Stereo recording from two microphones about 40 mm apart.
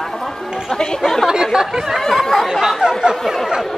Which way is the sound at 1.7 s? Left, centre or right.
Centre.